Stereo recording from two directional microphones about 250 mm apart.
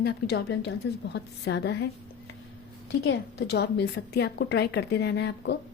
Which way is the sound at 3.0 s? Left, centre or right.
Left.